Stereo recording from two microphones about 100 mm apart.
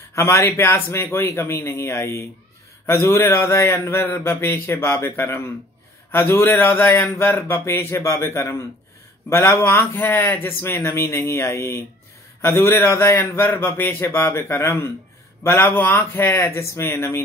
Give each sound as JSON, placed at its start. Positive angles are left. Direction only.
{"t": 0.1, "sound": "a man's voice", "side_deg": 30}